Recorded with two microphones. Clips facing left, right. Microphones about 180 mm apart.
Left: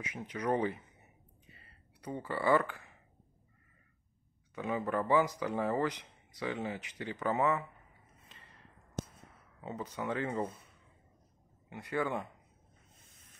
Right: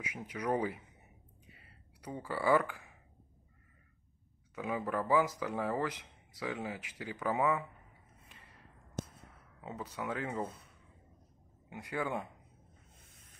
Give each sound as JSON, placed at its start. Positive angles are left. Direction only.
{"t": 0.0, "sound": "speech", "side_deg": -10}
{"t": 1.5, "sound": "a sound", "side_deg": -10}
{"t": 4.6, "sound": "speech", "side_deg": -5}
{"t": 9.6, "sound": "speech", "side_deg": -5}
{"t": 11.7, "sound": "speech", "side_deg": -10}